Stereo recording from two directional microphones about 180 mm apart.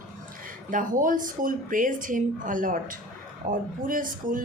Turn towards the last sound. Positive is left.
turn(degrees=-50)  # may be behind; listen again after turning